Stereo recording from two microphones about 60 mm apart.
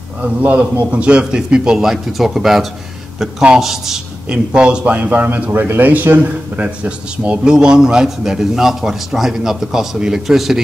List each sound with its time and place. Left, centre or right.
0.2 s a man's voice: right; by 4.0 s centre
4.3 s a man's voice: centre